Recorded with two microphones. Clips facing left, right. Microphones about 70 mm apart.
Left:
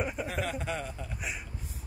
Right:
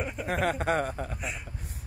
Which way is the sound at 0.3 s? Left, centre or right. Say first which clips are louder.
Right 7 dB; right.